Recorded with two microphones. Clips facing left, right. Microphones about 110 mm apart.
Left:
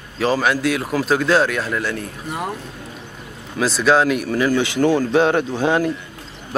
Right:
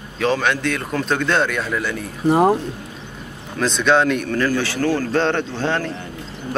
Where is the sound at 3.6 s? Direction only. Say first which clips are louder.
Left 1 dB; 5° left (ahead or behind).